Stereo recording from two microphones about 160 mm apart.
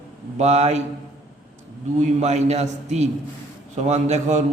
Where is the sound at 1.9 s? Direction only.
45° right (ahead or behind).